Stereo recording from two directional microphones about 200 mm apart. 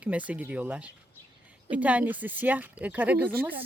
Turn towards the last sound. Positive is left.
turn(degrees=-10)  # may be behind; listen again after turning